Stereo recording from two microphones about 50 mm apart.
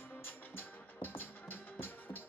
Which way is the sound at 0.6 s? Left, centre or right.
Left.